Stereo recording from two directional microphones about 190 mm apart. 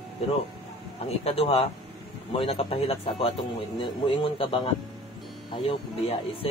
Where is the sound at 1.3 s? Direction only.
30° left (ahead or behind).